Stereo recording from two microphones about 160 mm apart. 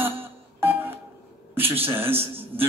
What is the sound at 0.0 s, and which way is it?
Music, 15° right (ahead or behind).